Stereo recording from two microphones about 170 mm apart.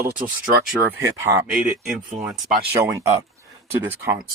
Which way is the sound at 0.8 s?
15° right (ahead or behind).